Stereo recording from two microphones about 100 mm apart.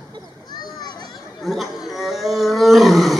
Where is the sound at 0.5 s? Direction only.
45° left (ahead or behind).